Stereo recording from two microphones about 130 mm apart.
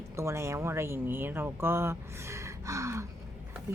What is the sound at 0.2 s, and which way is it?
Speech, 20° right (ahead or behind).